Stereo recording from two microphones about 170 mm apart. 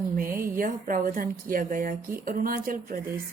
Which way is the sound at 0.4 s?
55° right (ahead or behind).